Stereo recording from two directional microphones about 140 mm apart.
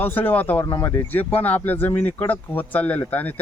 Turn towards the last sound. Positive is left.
turn(degrees=10)  # may be behind; listen again after turning